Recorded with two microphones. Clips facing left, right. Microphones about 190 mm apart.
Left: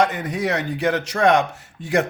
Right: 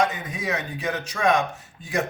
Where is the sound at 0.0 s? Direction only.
75° left (ahead or behind).